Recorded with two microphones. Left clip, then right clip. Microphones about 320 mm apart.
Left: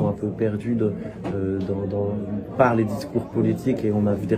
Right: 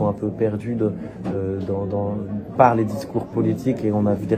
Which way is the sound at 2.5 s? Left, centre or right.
Centre.